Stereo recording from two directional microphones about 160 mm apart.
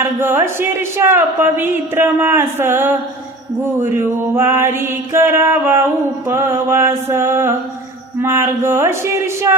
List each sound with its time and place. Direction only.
0.0 s mantra: 15° right (ahead or behind)